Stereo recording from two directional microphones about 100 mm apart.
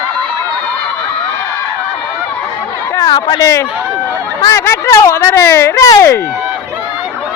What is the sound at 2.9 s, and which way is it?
Chatter, 40° left (ahead or behind).